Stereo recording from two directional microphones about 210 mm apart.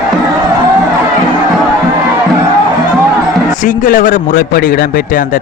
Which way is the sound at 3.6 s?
40° left (ahead or behind).